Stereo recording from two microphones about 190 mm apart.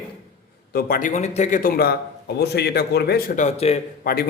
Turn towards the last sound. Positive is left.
turn(degrees=50)  # may be behind; listen again after turning